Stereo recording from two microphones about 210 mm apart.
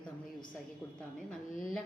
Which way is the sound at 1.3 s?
5° left (ahead or behind).